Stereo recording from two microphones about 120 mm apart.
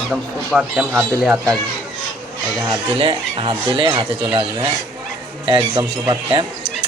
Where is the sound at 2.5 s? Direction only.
30° right (ahead or behind).